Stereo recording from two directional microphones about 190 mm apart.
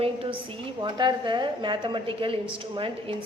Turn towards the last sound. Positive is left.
turn(degrees=-25)  # may be behind; listen again after turning